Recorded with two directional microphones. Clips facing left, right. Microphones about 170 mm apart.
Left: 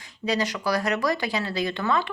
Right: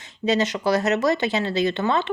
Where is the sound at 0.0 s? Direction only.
25° right (ahead or behind).